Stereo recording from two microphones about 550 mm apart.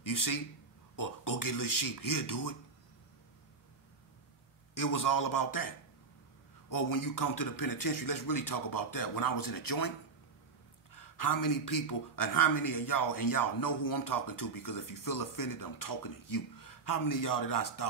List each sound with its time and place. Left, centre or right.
0.0 s a man's voice: left
4.7 s a man's voice: left
11.0 s a man's voice: left